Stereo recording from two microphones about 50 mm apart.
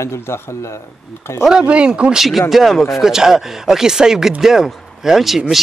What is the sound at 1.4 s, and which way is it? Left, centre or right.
Speech, centre.